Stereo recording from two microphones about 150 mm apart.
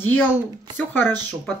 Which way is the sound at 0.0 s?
10° left (ahead or behind).